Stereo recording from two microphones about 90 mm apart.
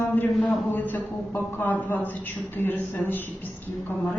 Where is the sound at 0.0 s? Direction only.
20° left (ahead or behind).